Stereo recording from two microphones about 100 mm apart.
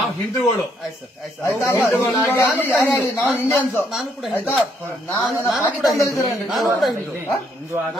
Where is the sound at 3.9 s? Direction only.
Centre (ahead or behind).